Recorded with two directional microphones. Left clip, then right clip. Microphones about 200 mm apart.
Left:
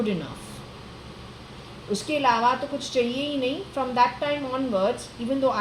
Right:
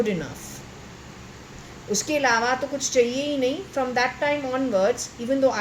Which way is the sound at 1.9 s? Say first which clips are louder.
Right 1 dB; 25° right (ahead or behind).